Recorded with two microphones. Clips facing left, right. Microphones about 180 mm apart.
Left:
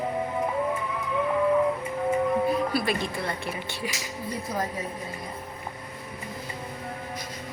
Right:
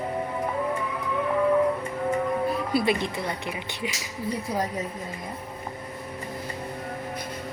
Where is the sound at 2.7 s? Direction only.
20° right (ahead or behind).